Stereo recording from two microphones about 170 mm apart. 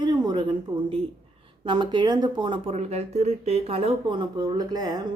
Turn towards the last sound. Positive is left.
turn(degrees=-25)  # may be behind; listen again after turning